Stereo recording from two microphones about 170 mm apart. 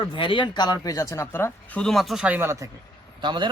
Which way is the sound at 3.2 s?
25° right (ahead or behind).